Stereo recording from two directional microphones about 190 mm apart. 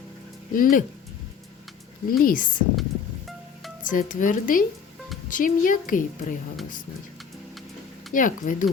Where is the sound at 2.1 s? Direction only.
50° left (ahead or behind).